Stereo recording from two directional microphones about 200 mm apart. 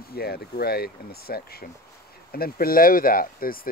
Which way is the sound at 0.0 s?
50° left (ahead or behind).